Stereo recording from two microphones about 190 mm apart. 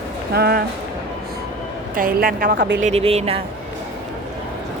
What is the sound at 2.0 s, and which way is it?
Speech, 50° right (ahead or behind).